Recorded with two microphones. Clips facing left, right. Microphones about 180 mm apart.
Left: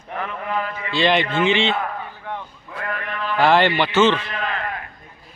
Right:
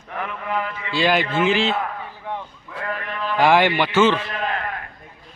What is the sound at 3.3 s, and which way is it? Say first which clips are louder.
Speech: even; 10° right (ahead or behind).